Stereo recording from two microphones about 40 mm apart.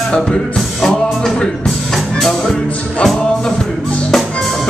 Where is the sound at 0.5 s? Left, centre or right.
Centre.